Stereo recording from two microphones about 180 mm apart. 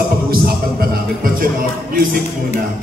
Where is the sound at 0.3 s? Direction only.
55° right (ahead or behind).